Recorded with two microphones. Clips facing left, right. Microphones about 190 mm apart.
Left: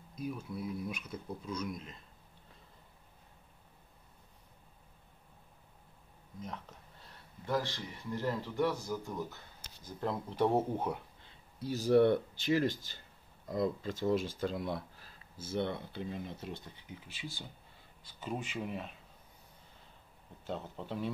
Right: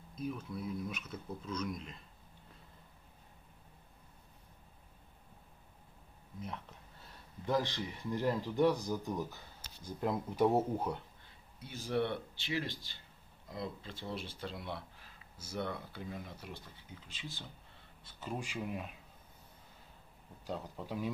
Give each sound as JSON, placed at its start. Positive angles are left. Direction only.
{"t": 0.2, "sound": "speech", "side_deg": 10}
{"t": 7.4, "sound": "speech", "side_deg": -20}
{"t": 11.6, "sound": "speech", "side_deg": 40}
{"t": 18.2, "sound": "speech", "side_deg": -5}
{"t": 20.4, "sound": "speech", "side_deg": -5}